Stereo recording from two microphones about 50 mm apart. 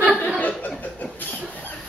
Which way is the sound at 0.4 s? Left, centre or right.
Left.